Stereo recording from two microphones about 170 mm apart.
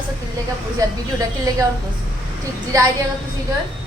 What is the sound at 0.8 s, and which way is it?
Speech, 20° right (ahead or behind).